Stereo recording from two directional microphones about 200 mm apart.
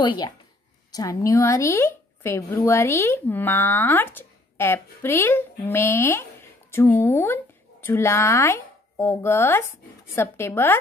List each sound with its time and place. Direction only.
0.0 s a woman's voice: 20° left (ahead or behind)